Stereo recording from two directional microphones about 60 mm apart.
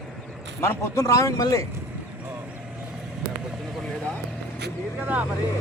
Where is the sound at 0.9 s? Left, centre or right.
Left.